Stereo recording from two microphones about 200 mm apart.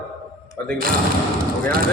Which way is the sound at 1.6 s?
45° right (ahead or behind).